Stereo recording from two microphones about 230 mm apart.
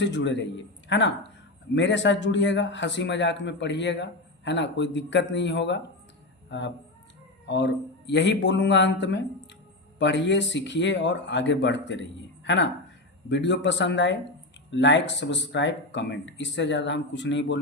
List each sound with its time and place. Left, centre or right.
0.0 s a man's voice: left
13.2 s a man's voice: left